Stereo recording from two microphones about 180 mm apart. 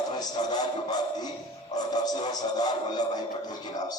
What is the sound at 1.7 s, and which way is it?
Music, 20° left (ahead or behind).